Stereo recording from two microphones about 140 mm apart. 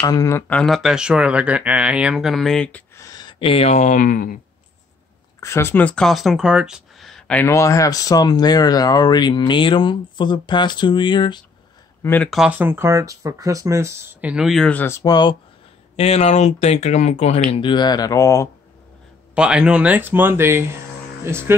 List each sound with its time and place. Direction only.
0.0 s speech: 25° left (ahead or behind)
0.5 s speech: 5° left (ahead or behind)
3.0 s speech: 30° left (ahead or behind); by 4.4 s 75° left (ahead or behind)
5.4 s speech: 20° left (ahead or behind)
7.4 s speech: 20° left (ahead or behind)
12.0 s speech: 15° left (ahead or behind)
12.3 s speech: 5° right (ahead or behind)
14.2 s speech: 5° right (ahead or behind); by 15.1 s 20° left (ahead or behind)
16.0 s speech: 50° left (ahead or behind)
17.5 s speech: 35° left (ahead or behind)
19.3 s speech: 5° right (ahead or behind)